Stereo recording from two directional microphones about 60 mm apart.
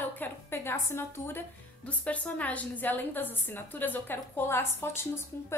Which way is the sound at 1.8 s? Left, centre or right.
Left.